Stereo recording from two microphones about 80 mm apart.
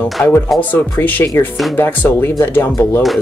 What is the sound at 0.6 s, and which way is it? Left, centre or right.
Speech, left.